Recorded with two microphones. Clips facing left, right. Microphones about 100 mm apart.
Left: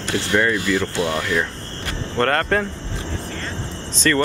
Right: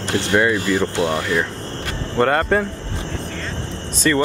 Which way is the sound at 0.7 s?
25° right (ahead or behind).